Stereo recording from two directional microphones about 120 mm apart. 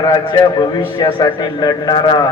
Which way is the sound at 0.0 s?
35° left (ahead or behind).